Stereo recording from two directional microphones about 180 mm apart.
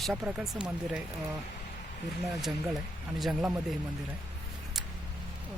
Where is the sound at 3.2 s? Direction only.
5° right (ahead or behind).